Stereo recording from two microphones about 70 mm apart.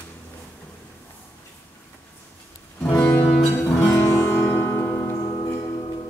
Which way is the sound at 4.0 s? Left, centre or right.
Left.